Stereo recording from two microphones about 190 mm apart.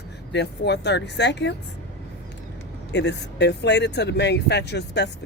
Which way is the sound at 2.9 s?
65° left (ahead or behind).